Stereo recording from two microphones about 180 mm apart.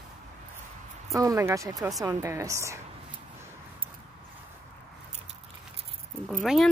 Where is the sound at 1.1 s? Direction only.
20° right (ahead or behind).